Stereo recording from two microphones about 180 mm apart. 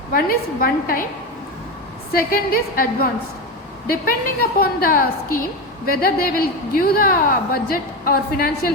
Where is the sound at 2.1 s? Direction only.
55° left (ahead or behind).